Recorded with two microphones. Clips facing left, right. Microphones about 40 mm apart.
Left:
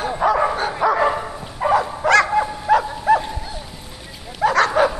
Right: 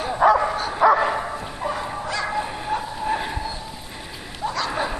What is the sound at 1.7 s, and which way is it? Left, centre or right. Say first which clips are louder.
Dog: left 13 dB; left.